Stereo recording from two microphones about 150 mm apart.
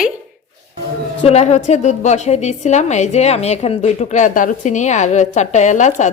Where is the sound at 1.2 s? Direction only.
45° left (ahead or behind).